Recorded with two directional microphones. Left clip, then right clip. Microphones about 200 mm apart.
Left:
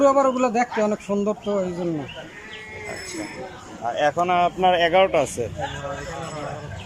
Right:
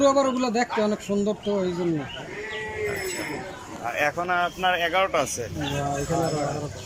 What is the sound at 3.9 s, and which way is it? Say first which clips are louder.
A man's voice: left 4 dB; 10° left (ahead or behind).